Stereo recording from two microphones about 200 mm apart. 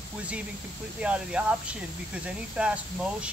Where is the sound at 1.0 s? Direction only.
5° right (ahead or behind).